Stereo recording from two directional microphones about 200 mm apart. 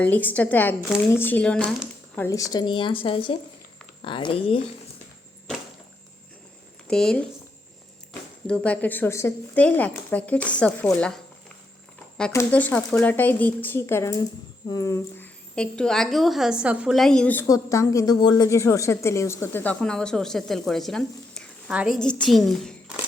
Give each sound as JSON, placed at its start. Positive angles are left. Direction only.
{"t": 0.0, "sound": "speech", "side_deg": 10}
{"t": 6.8, "sound": "speech", "side_deg": 5}
{"t": 8.4, "sound": "a woman's voice", "side_deg": 5}
{"t": 12.3, "sound": "a woman's voice", "side_deg": 10}